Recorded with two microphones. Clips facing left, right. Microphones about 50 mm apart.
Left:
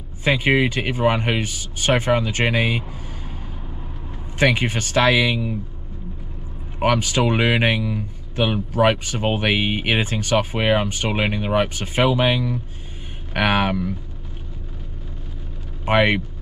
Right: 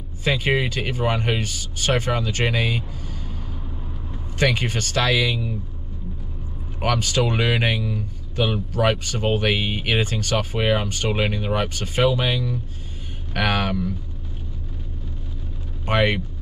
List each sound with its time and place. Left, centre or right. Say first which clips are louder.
0.2 s speech: left 3 dB; centre
4.4 s speech: left 3 dB; centre
6.8 s speech: left 3 dB; left
15.8 s speech: left 3 dB; centre